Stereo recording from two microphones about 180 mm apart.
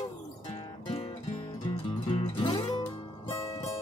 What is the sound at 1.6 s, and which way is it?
Music, 30° left (ahead or behind).